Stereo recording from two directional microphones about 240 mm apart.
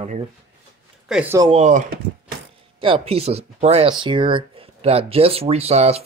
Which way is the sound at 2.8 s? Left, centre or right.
Right.